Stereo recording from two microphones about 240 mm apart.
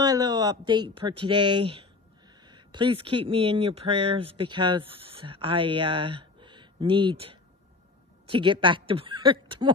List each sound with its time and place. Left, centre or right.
0.0 s speech: centre
2.4 s a sound: centre
3.3 s speech: right